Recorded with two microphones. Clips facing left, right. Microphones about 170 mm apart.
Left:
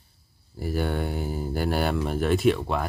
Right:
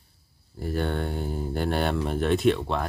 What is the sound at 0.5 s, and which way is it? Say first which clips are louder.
Speech: left 1 dB; 5° left (ahead or behind).